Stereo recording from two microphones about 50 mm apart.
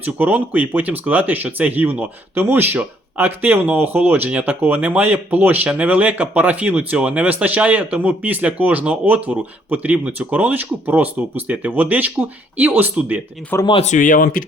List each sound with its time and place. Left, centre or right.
0.0 s speech: right
13.5 s speech: left